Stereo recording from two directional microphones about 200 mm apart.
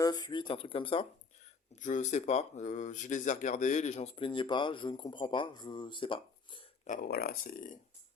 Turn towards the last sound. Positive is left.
turn(degrees=45)  # may be behind; listen again after turning